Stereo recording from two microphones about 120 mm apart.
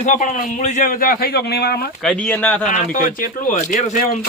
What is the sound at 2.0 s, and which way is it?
Speech, 10° left (ahead or behind).